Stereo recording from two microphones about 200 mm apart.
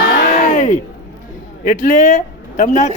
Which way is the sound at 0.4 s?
40° left (ahead or behind).